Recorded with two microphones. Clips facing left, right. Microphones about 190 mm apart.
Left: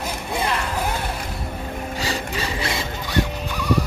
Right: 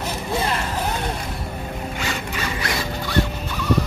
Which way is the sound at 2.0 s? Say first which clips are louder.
Left 3 dB; 30° left (ahead or behind).